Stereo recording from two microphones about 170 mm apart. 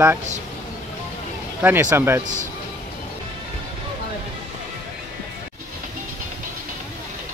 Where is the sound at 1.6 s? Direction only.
10° right (ahead or behind).